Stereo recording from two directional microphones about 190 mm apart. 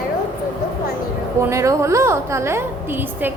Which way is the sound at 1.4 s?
15° right (ahead or behind).